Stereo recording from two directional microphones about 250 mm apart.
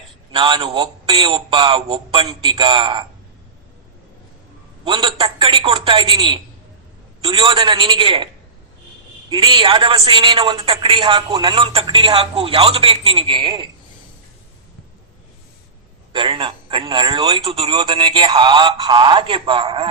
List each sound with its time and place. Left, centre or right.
0.3 s a woman's voice: centre
4.9 s a woman's voice: centre
9.3 s a woman's voice: centre
16.1 s a woman's voice: centre